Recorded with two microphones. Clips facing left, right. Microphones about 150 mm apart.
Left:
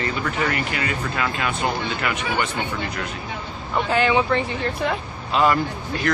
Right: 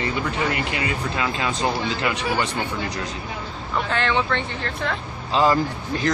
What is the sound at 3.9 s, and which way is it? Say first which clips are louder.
Speech: left 4 dB; 10° left (ahead or behind).